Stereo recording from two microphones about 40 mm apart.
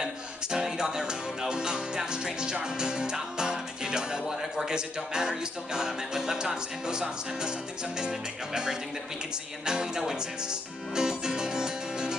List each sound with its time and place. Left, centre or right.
0.0 s music: centre
4.3 s music: centre
4.6 s music: centre